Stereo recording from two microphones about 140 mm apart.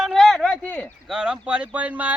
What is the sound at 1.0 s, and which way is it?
Speech, 5° right (ahead or behind).